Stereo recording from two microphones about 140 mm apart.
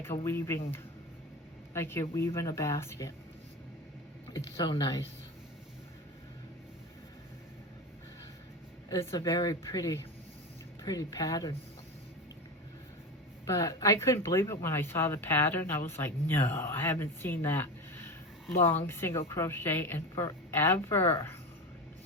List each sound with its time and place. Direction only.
0.3 s speech: 20° left (ahead or behind)
1.7 s speech: 20° left (ahead or behind)
4.3 s speech: 30° left (ahead or behind)
8.9 s speech: 20° left (ahead or behind)
13.5 s speech: 20° left (ahead or behind)